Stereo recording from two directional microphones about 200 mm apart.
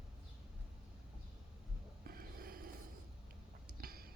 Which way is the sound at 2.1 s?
45° right (ahead or behind).